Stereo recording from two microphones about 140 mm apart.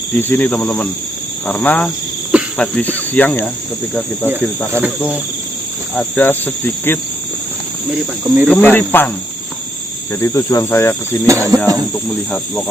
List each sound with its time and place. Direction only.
0.2 s cricket: 15° left (ahead or behind)
4.3 s cricket: 15° right (ahead or behind)
5.9 s cricket: 10° left (ahead or behind)
7.9 s cricket: 15° right (ahead or behind)
8.4 s cricket: 10° left (ahead or behind)
10.2 s speech: 20° left (ahead or behind)
11.3 s speech: 20° right (ahead or behind)